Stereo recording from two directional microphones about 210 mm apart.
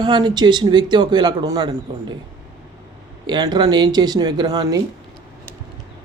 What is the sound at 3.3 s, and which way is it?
Speech, 20° right (ahead or behind).